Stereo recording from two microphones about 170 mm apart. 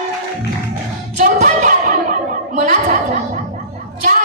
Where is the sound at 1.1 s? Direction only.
45° right (ahead or behind).